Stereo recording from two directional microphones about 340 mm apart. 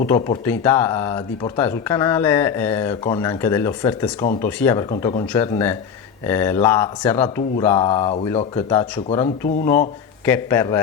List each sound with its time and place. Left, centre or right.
0.1 s speech: centre